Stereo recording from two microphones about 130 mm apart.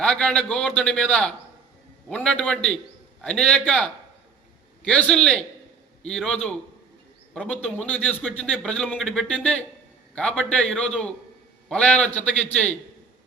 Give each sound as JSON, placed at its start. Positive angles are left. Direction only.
{"t": 0.0, "sound": "a man's voice", "side_deg": 5}